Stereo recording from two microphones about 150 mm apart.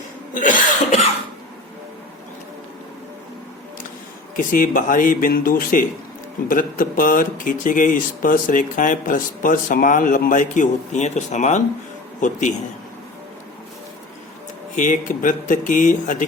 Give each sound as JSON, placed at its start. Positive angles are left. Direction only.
{"t": 0.3, "sound": "cough", "side_deg": 60}
{"t": 4.4, "sound": "speech", "side_deg": 65}
{"t": 14.8, "sound": "speech", "side_deg": 60}